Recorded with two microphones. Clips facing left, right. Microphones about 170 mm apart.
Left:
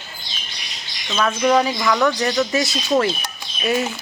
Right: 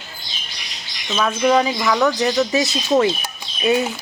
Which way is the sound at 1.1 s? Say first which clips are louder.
Right 1 dB; 5° right (ahead or behind).